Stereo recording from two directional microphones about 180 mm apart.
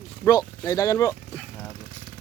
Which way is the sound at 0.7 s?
20° left (ahead or behind).